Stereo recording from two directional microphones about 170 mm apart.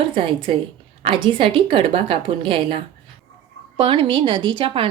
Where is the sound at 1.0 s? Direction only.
30° right (ahead or behind).